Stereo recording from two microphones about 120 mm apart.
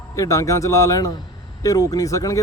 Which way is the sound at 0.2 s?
25° left (ahead or behind).